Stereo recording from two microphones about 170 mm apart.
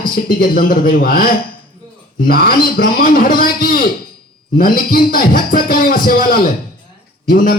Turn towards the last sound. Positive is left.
turn(degrees=55)  # may be behind; listen again after turning